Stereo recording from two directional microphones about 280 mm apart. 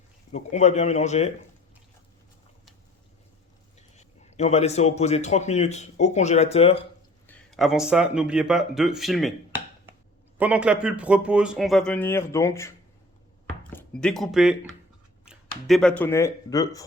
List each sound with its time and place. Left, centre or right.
0.3 s speech: left
3.8 s a man's voice: left
7.3 s speech: centre
10.3 s speech: centre
13.7 s speech: centre